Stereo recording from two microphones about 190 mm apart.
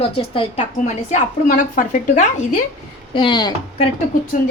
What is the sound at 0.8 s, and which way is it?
A woman's voice, 40° left (ahead or behind).